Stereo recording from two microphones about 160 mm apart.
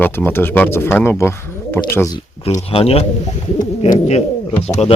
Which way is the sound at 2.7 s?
35° left (ahead or behind).